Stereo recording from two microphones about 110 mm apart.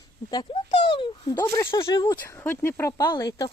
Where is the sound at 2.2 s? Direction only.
20° left (ahead or behind).